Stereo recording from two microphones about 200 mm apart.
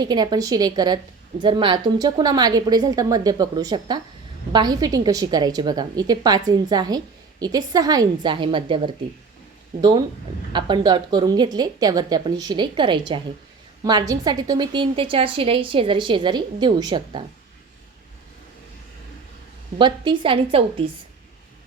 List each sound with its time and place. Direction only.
0.0 s a woman's voice: 20° right (ahead or behind)
10.5 s a woman's voice: 20° right (ahead or behind)
19.8 s a woman's voice: 25° right (ahead or behind)